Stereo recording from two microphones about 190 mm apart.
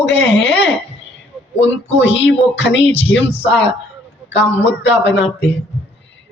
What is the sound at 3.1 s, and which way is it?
Speech, 10° left (ahead or behind).